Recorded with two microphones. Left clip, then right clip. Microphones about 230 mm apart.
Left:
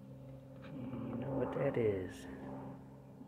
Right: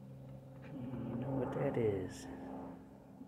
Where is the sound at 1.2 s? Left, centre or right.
Centre.